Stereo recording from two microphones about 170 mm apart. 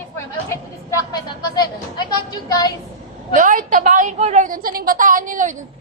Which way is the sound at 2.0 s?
25° left (ahead or behind).